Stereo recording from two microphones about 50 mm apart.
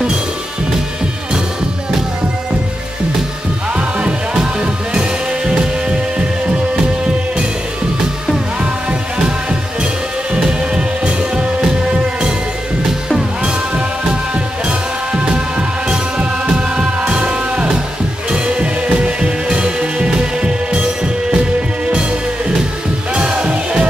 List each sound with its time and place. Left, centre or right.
3.7 s music: right
9.2 s music: centre
13.4 s music: right
23.1 s music: right